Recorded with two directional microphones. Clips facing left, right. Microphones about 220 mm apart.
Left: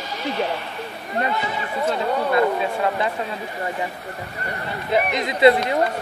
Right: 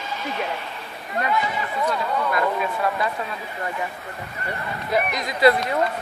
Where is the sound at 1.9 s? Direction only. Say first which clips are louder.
Left 4 dB; 30° left (ahead or behind).